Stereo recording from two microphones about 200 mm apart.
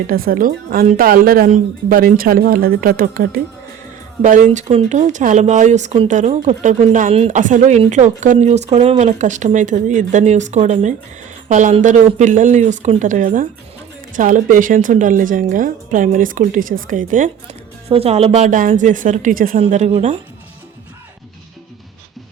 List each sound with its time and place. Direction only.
0.1 s speech: 45° right (ahead or behind)